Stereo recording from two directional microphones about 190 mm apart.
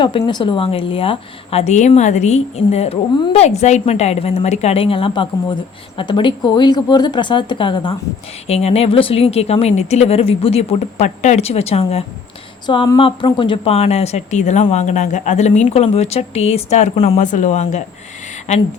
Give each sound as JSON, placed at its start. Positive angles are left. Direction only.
{"t": 0.0, "sound": "a woman's voice", "side_deg": 25}